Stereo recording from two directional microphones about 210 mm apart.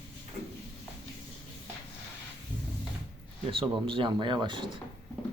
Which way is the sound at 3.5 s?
25° right (ahead or behind).